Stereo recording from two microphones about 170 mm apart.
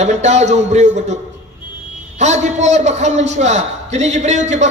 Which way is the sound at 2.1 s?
45° right (ahead or behind).